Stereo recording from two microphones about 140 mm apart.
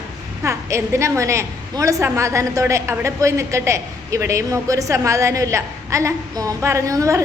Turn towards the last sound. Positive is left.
turn(degrees=-20)  # may be behind; listen again after turning